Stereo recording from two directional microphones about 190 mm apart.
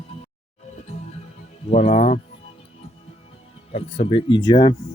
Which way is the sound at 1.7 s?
35° left (ahead or behind).